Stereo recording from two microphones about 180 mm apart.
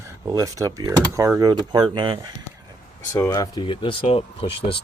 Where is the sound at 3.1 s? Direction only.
15° left (ahead or behind); by 4.7 s 30° left (ahead or behind).